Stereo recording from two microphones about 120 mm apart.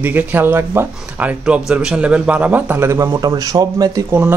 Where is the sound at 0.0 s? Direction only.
15° right (ahead or behind).